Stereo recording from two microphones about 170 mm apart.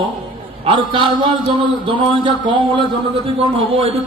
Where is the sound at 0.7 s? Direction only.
30° right (ahead or behind).